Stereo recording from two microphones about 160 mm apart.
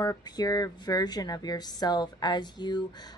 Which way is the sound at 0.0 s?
25° left (ahead or behind).